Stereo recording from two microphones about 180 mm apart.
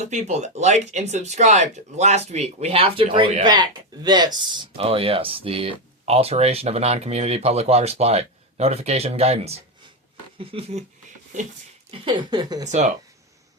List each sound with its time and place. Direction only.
0.0 s speech: 40° right (ahead or behind)
11.9 s speech: 25° right (ahead or behind)
12.6 s speech: 40° right (ahead or behind)